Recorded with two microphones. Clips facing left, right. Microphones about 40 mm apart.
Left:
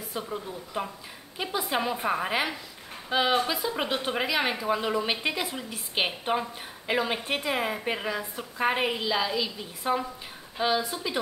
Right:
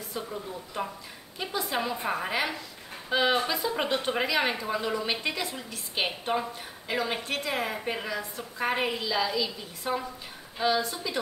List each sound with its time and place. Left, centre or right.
0.1 s a woman's voice: centre